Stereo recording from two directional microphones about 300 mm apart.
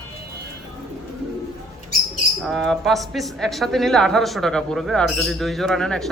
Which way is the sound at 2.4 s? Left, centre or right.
Centre.